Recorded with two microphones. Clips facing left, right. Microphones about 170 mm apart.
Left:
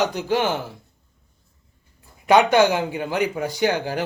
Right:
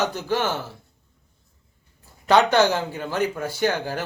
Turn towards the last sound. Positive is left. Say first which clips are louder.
# left 2 dB
turn(degrees=15)  # may be behind; listen again after turning